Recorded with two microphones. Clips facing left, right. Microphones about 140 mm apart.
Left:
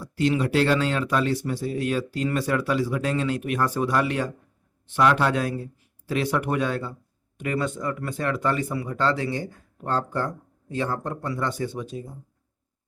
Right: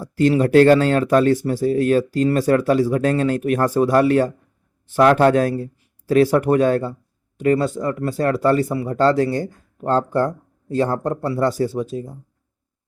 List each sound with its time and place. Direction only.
0.0 s speech: 45° right (ahead or behind)